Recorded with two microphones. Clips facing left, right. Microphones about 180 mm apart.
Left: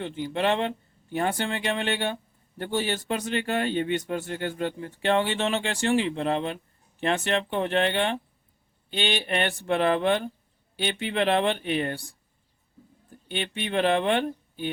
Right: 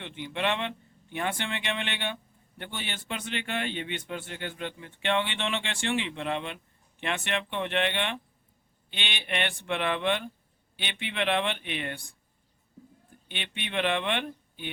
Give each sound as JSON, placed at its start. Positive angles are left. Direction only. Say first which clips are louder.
{"t": 0.0, "sound": "speech", "louder": "left 5 dB", "side_deg": 40}